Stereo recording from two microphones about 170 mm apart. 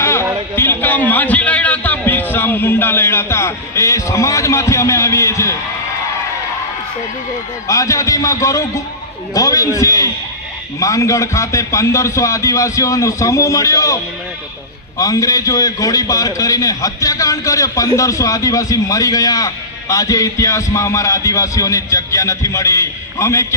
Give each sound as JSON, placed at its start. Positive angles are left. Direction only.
{"t": 0.0, "sound": "a sound", "side_deg": 15}
{"t": 0.5, "sound": "a man's voice", "side_deg": 15}
{"t": 7.7, "sound": "a man's voice", "side_deg": 20}